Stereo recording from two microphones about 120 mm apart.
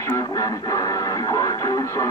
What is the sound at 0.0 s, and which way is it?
Speech, 30° left (ahead or behind).